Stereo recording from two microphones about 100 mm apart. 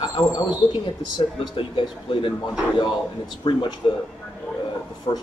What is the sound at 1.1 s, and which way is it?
Speech, 50° left (ahead or behind).